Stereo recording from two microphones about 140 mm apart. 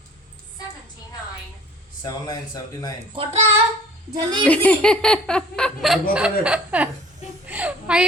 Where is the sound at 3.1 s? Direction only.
40° right (ahead or behind).